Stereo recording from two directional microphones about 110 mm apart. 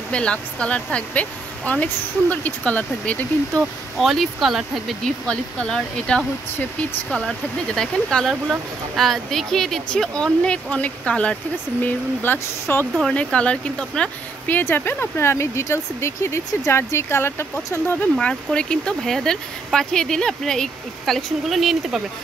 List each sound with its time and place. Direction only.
0.1 s a woman's voice: 10° left (ahead or behind)
4.0 s a woman's voice: centre (ahead or behind); by 12.8 s 20° left (ahead or behind)
12.9 s a woman's voice: 5° left (ahead or behind)
14.6 s a woman's voice: 20° left (ahead or behind); by 22.0 s centre (ahead or behind)